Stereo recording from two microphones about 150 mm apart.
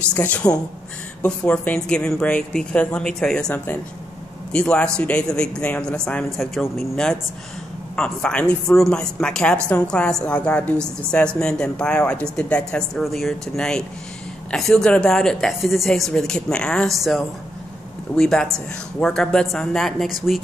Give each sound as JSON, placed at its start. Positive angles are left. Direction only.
{"t": 0.1, "sound": "a woman's voice", "side_deg": 10}